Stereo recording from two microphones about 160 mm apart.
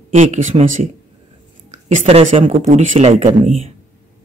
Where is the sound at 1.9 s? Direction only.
45° right (ahead or behind).